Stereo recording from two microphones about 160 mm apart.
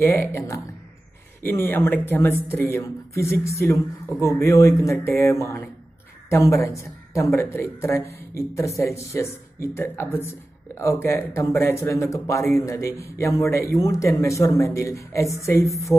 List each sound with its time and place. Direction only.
0.0 s speech: 15° left (ahead or behind)